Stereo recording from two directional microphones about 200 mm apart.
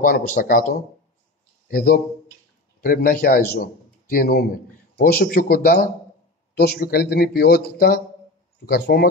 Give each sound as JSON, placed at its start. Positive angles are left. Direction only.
{"t": 0.0, "sound": "a man's voice", "side_deg": 50}